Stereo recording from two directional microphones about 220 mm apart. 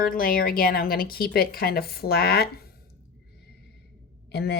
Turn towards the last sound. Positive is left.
turn(degrees=45)  # may be behind; listen again after turning